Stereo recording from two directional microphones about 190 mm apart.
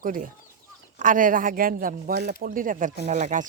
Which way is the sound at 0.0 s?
45° right (ahead or behind).